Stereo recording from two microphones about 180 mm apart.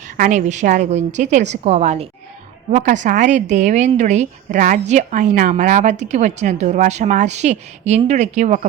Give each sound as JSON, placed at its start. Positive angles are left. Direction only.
{"t": 0.2, "sound": "a woman's voice", "side_deg": -45}